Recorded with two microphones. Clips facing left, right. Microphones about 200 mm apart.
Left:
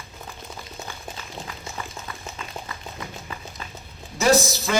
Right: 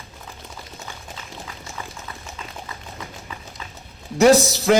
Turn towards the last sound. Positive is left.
turn(degrees=-70)  # may be behind; listen again after turning